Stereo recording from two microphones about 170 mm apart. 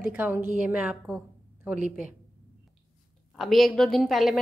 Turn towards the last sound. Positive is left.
turn(degrees=0)  # may be behind; listen again after turning